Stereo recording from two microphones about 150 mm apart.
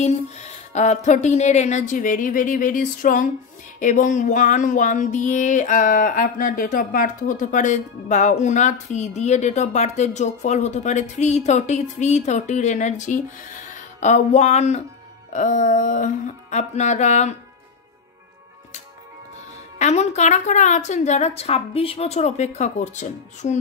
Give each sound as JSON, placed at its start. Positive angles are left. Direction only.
{"t": 0.7, "sound": "speech", "side_deg": 50}
{"t": 19.8, "sound": "speech", "side_deg": 50}